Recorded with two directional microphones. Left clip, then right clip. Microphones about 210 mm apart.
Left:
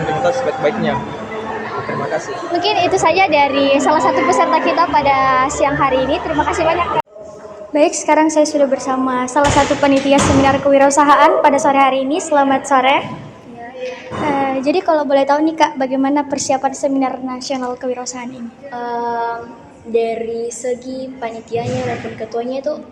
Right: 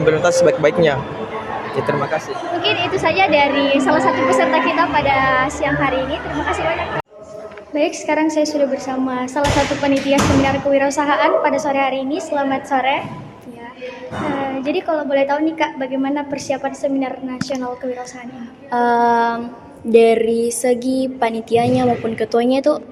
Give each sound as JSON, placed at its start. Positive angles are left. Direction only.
{"t": 0.2, "sound": "a man's voice", "side_deg": -55}
{"t": 2.6, "sound": "a woman's voice", "side_deg": 25}
{"t": 7.7, "sound": "a woman's voice", "side_deg": 15}
{"t": 14.6, "sound": "a woman's voice", "side_deg": 20}
{"t": 18.7, "sound": "a sound", "side_deg": -55}